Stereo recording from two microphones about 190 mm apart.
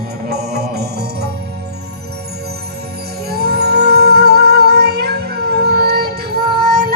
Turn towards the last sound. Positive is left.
turn(degrees=-55)  # may be behind; listen again after turning